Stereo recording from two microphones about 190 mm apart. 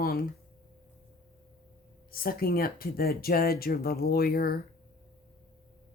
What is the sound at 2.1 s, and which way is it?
Speech, 50° left (ahead or behind).